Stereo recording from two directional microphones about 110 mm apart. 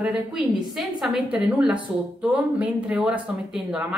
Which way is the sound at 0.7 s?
5° right (ahead or behind).